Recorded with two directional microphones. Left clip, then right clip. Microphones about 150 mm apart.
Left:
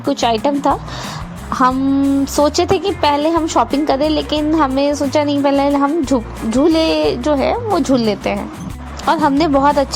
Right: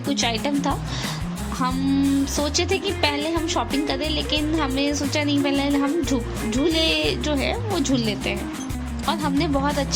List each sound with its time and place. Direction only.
0.1 s a woman's voice: 30° left (ahead or behind)
0.3 s a woman's voice: 40° left (ahead or behind)
2.2 s a woman's voice: 40° left (ahead or behind)
9.0 s speech: 50° left (ahead or behind)
9.6 s a woman's voice: 35° left (ahead or behind)